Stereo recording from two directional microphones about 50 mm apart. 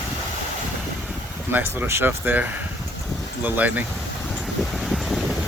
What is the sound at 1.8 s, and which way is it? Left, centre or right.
Speech, right.